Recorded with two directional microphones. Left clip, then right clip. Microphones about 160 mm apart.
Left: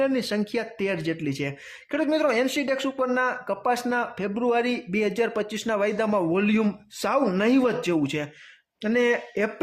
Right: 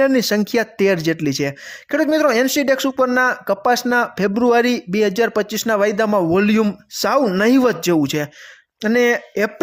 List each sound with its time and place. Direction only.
0.0 s speech: 45° right (ahead or behind)